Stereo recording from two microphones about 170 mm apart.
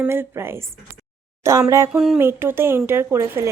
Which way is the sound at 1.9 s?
5° right (ahead or behind).